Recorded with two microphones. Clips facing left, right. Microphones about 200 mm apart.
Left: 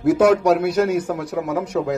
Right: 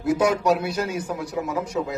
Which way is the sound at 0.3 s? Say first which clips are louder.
Left 6 dB; 55° left (ahead or behind).